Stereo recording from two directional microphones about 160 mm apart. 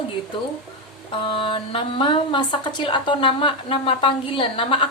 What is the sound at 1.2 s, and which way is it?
Speech, 35° left (ahead or behind).